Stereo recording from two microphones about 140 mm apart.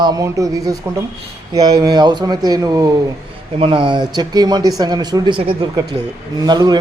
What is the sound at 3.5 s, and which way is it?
A man's voice, 40° right (ahead or behind).